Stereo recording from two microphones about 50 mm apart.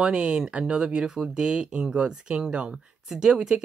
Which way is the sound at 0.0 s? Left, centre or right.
Centre.